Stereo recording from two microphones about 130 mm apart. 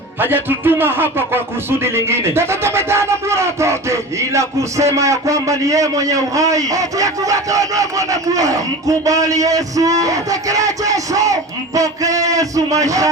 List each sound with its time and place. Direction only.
0.2 s a man's voice: 15° right (ahead or behind)
1.8 s music: 20° right (ahead or behind)